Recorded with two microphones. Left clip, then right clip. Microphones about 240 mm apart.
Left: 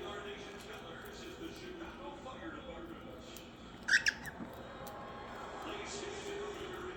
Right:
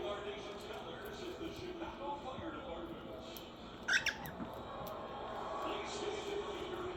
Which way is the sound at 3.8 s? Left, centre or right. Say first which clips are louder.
Left 4 dB; centre.